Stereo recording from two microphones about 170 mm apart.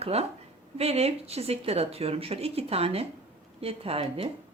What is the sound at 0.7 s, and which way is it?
Speech, 35° right (ahead or behind).